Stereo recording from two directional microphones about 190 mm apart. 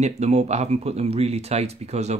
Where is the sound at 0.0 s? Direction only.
35° right (ahead or behind).